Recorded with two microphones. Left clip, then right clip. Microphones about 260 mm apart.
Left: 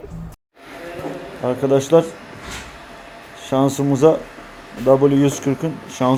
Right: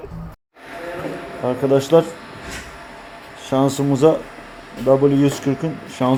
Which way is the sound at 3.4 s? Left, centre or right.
Centre.